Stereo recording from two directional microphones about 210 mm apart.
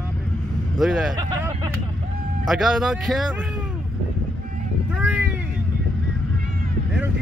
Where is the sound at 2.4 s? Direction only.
Centre (ahead or behind).